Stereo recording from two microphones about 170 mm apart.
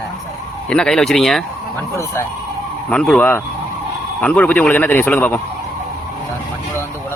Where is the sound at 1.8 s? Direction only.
15° left (ahead or behind).